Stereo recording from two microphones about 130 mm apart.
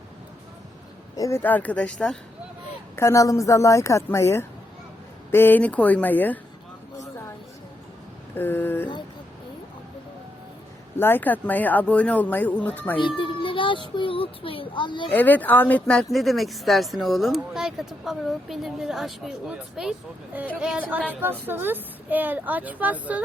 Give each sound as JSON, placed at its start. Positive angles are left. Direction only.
{"t": 1.1, "sound": "speech", "side_deg": 25}
{"t": 1.4, "sound": "speech", "side_deg": 15}
{"t": 2.9, "sound": "speech", "side_deg": 20}
{"t": 8.4, "sound": "speech", "side_deg": 15}
{"t": 10.9, "sound": "speech", "side_deg": 15}
{"t": 13.0, "sound": "baby cry", "side_deg": 40}
{"t": 13.9, "sound": "a child's voice", "side_deg": 40}
{"t": 15.1, "sound": "a woman's voice", "side_deg": 15}